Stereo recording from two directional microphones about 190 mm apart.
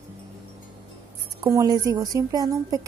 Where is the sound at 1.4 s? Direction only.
15° right (ahead or behind).